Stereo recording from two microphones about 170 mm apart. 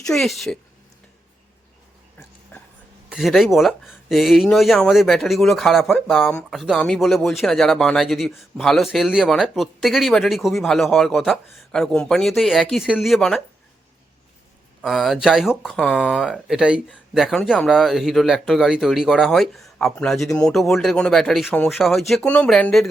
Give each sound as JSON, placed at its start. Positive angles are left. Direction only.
{"t": 0.0, "sound": "speech", "side_deg": 0}
{"t": 2.5, "sound": "a sound", "side_deg": 10}
{"t": 3.1, "sound": "speech", "side_deg": 0}
{"t": 14.8, "sound": "speech", "side_deg": 0}